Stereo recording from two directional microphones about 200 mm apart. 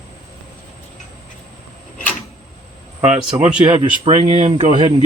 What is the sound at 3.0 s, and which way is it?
Speech, 5° right (ahead or behind).